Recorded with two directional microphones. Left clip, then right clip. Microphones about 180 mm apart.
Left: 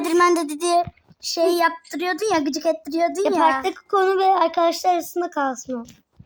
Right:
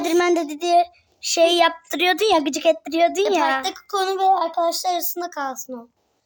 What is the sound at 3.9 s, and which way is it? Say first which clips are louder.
Speech: left 3 dB; 25° left (ahead or behind).